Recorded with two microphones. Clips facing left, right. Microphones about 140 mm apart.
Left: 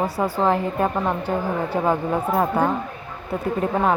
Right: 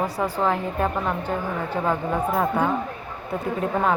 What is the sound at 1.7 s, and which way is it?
Speech, 15° left (ahead or behind).